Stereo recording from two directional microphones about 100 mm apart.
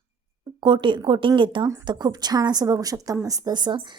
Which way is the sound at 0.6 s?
55° right (ahead or behind).